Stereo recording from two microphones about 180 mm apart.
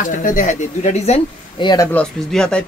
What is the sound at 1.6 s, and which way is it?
Speech, 25° left (ahead or behind).